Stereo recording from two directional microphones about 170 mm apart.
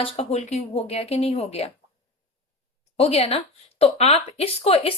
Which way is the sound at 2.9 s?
35° left (ahead or behind).